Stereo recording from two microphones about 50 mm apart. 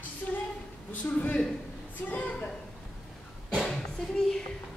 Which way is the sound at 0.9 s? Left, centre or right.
Left.